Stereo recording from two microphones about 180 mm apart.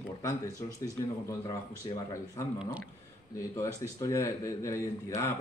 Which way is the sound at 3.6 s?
15° left (ahead or behind).